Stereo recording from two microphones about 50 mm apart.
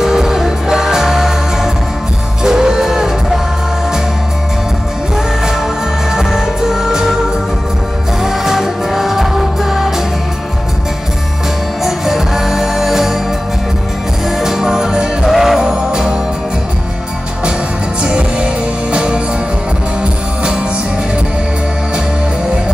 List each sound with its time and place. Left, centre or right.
0.0 s music: centre
5.1 s music: centre
8.2 s music: centre
11.8 s music: centre
14.2 s music: centre
18.0 s music: centre